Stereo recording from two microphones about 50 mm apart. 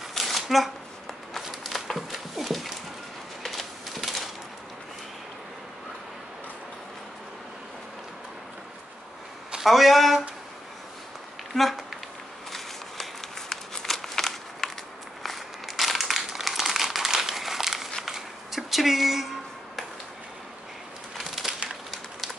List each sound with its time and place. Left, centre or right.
0.1 s shuffling cards: centre
1.3 s dog: centre
3.4 s a sound: centre
9.6 s speech: centre
11.5 s a sound: centre
21.4 s splinter: centre